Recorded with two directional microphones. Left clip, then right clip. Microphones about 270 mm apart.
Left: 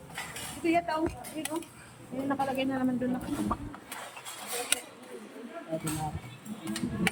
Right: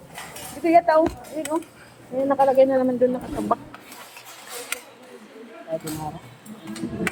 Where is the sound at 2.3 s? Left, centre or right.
Centre.